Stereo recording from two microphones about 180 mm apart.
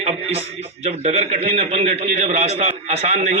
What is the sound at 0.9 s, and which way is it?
A man's voice, 35° right (ahead or behind).